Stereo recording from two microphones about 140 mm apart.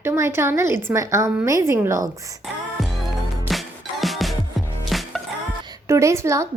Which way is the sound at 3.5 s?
Centre (ahead or behind).